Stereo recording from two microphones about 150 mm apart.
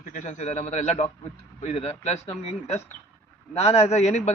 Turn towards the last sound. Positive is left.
turn(degrees=50)  # may be behind; listen again after turning